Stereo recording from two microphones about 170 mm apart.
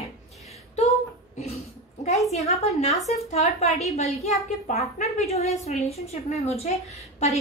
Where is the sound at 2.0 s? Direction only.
40° left (ahead or behind).